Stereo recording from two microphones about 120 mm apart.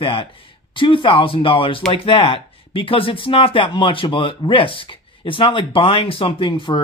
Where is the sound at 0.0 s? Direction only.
50° left (ahead or behind).